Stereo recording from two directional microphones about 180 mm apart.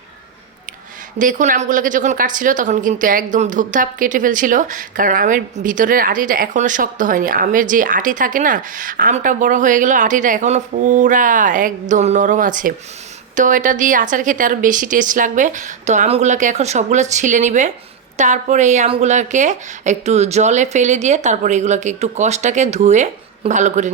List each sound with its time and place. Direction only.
1.2 s a woman's voice: 45° right (ahead or behind)